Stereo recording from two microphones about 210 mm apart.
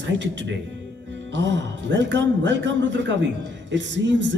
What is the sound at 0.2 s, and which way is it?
Speech, 60° right (ahead or behind).